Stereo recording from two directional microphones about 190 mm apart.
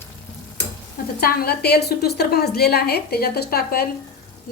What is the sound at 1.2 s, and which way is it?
A woman's voice, 50° left (ahead or behind).